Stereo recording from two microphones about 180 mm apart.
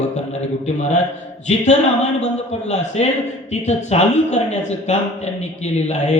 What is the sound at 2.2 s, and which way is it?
A man's voice, 35° left (ahead or behind).